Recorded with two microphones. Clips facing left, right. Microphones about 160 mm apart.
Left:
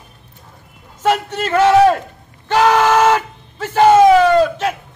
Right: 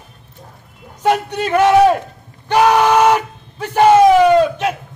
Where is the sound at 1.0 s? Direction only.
15° right (ahead or behind).